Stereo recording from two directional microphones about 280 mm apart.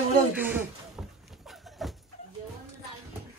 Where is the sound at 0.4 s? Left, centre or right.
Centre.